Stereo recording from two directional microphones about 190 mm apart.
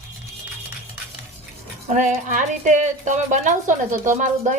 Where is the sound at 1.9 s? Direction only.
40° right (ahead or behind).